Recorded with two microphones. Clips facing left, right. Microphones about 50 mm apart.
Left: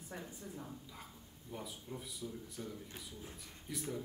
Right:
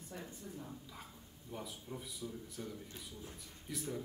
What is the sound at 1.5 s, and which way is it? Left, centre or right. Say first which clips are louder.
A man's voice: even; centre.